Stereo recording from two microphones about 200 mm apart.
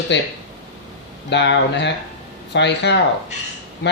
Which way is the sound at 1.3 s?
60° left (ahead or behind).